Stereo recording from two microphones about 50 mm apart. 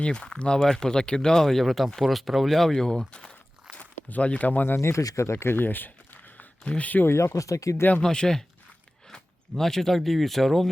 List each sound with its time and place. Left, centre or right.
0.0 s speech: centre
4.8 s speech: left
5.5 s speech: left
6.3 s a sound: left
7.3 s speech: left
8.0 s speech: centre